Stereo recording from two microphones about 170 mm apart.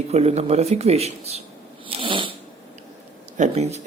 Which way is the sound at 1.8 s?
30° right (ahead or behind).